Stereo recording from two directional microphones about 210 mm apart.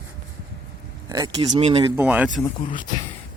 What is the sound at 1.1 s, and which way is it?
Speech, 20° right (ahead or behind).